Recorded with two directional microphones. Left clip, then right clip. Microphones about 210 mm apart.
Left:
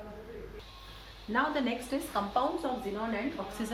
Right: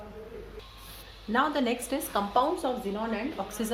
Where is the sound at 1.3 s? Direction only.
55° right (ahead or behind).